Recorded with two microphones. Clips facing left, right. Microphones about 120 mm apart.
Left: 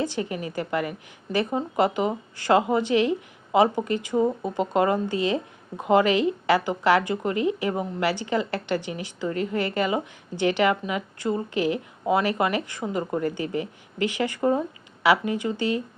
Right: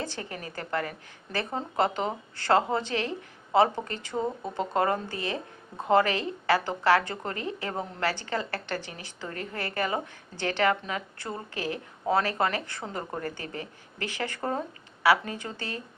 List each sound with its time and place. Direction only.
0.0 s a woman's voice: 15° left (ahead or behind)